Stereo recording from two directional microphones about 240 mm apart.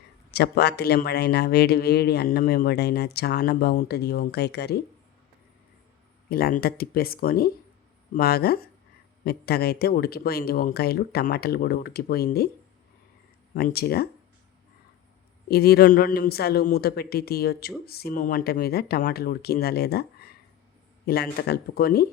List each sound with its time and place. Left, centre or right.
0.3 s speech: left
6.2 s speech: left
13.6 s speech: left
15.4 s speech: left